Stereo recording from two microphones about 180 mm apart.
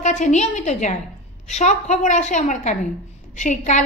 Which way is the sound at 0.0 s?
40° left (ahead or behind).